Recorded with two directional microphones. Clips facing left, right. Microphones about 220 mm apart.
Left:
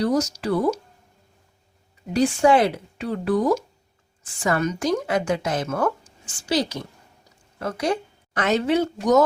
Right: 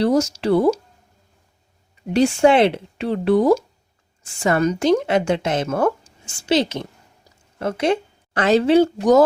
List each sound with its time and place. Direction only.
0.0 s a woman's voice: 25° right (ahead or behind)
2.1 s a woman's voice: 25° right (ahead or behind)